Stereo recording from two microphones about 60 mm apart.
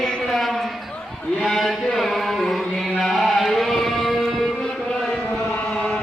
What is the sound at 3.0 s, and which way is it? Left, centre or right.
Chant, centre.